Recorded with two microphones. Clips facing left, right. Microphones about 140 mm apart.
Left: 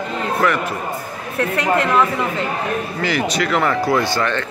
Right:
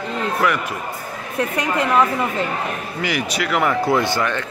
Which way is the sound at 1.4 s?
15° right (ahead or behind).